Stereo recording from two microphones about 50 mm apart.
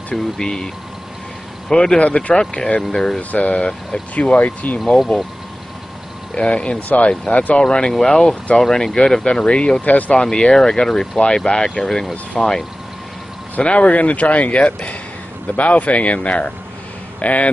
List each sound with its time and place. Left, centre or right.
0.1 s speech: centre
1.7 s speech: centre
2.0 s speech: left
3.2 s speech: left
6.3 s speech: left
7.6 s speech: centre
10.1 s speech: centre
13.6 s speech: left